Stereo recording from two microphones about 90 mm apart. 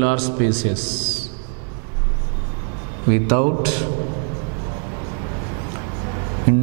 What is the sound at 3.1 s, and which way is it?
Mantra, 15° right (ahead or behind).